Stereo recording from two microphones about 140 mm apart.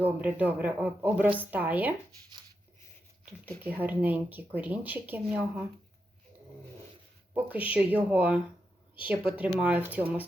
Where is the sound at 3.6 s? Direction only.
15° right (ahead or behind).